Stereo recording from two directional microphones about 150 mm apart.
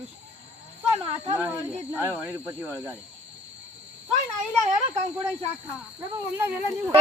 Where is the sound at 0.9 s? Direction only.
40° right (ahead or behind).